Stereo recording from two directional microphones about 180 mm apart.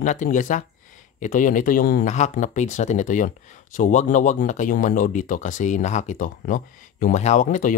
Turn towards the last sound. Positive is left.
turn(degrees=45)  # may be behind; listen again after turning